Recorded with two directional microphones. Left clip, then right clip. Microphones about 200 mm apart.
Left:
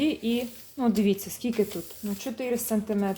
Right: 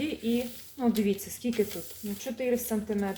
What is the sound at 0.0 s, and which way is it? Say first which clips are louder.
Speech: left 4 dB; 40° left (ahead or behind).